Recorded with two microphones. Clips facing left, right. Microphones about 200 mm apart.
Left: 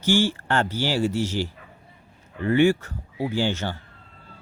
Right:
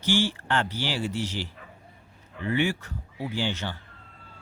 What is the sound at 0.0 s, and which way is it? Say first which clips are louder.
Speech: left 4 dB; 45° left (ahead or behind).